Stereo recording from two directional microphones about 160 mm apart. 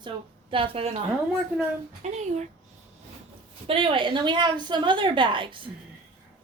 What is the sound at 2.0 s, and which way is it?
Speech, 45° right (ahead or behind).